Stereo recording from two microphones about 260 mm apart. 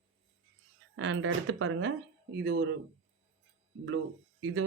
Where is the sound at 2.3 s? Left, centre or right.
Right.